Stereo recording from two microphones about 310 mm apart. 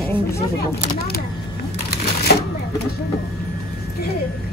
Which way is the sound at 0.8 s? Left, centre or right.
Left.